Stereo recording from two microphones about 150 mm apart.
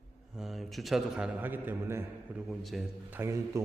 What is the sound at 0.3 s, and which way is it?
A man's voice, centre (ahead or behind).